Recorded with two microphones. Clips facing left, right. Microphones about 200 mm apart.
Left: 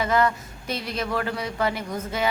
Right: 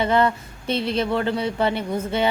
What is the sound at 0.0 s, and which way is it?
A woman's voice, 30° right (ahead or behind).